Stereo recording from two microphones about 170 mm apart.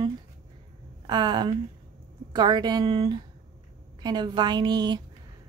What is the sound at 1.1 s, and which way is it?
Speech, 25° right (ahead or behind).